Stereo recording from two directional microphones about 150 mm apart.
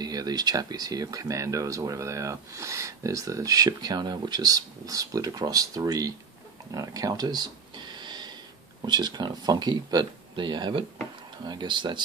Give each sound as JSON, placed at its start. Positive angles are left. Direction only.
{"t": 0.0, "sound": "speech", "side_deg": -25}
{"t": 6.7, "sound": "a sound", "side_deg": -25}
{"t": 8.8, "sound": "speech", "side_deg": -30}